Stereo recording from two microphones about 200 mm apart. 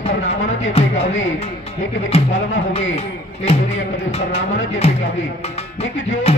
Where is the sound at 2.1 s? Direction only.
30° left (ahead or behind).